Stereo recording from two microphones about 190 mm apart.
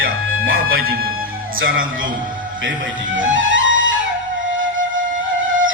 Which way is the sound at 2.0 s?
45° right (ahead or behind).